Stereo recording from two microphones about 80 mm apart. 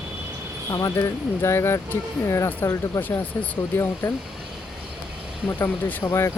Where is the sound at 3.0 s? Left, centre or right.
Left.